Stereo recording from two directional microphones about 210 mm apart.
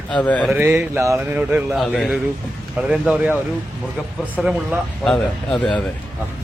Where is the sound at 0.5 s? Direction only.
10° right (ahead or behind).